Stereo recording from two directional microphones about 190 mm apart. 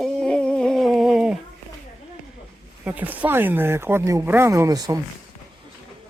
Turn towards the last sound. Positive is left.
turn(degrees=-20)  # may be behind; listen again after turning